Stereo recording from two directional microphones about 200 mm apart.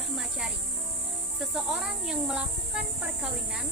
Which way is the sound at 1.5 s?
5° right (ahead or behind).